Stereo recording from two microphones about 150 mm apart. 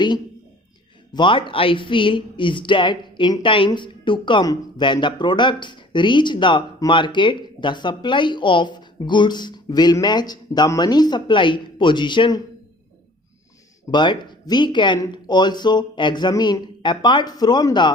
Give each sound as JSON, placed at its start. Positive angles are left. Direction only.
{"t": 1.1, "sound": "speech", "side_deg": 35}
{"t": 13.9, "sound": "speech", "side_deg": 30}